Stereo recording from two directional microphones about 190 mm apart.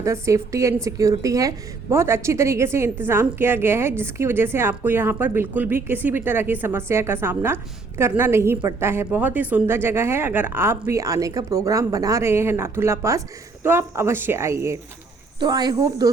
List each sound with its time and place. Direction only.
0.0 s a woman's voice: 15° right (ahead or behind)